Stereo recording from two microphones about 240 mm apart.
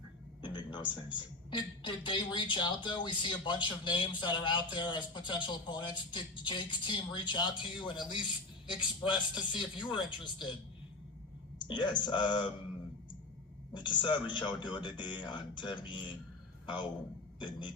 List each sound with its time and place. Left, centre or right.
0.4 s a man's voice: centre
11.6 s a man's voice: centre
13.7 s a man's voice: centre